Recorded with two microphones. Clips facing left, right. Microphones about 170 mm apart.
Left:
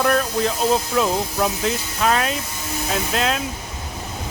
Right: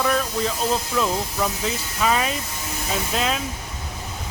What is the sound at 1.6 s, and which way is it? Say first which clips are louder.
Speech: left 3 dB; centre (ahead or behind).